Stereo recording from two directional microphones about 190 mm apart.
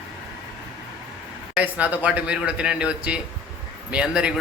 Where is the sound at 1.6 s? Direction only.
5° right (ahead or behind).